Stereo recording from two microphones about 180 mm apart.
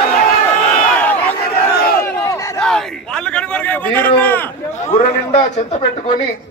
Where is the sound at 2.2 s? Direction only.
20° left (ahead or behind).